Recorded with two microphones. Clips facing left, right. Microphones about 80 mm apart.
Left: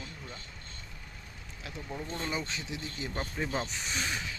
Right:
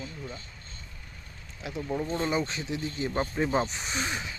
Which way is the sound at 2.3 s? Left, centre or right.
Right.